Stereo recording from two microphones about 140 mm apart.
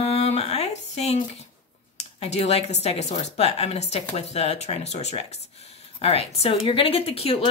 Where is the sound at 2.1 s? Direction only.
50° left (ahead or behind).